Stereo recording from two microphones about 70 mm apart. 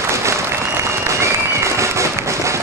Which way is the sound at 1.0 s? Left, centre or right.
Right.